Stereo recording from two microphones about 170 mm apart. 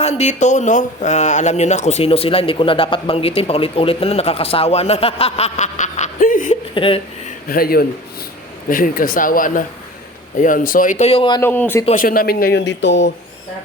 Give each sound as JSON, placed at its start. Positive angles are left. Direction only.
{"t": 0.0, "sound": "a man's voice", "side_deg": 40}
{"t": 6.7, "sound": "a man's voice", "side_deg": 30}
{"t": 7.4, "sound": "speech", "side_deg": 60}
{"t": 11.3, "sound": "a man's voice", "side_deg": 10}
{"t": 11.9, "sound": "speech", "side_deg": 55}